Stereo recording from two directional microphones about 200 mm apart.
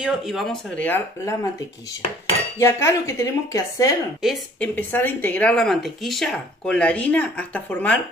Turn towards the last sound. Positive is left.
turn(degrees=5)  # may be behind; listen again after turning